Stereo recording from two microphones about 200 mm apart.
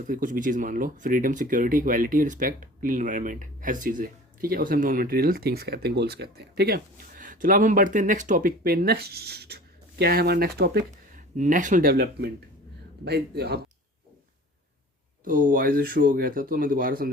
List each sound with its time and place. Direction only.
0.0 s speech: 40° right (ahead or behind)
15.2 s speech: 40° right (ahead or behind)